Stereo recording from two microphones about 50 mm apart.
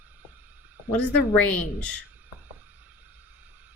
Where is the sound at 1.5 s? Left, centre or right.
Left.